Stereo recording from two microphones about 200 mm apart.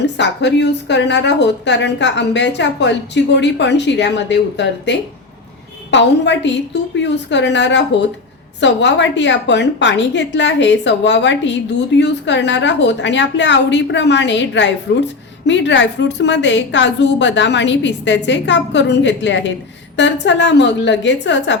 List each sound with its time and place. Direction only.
0.0 s a woman's voice: 60° left (ahead or behind)